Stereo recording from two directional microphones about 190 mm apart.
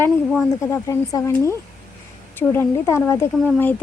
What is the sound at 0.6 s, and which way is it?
Speech, 15° left (ahead or behind).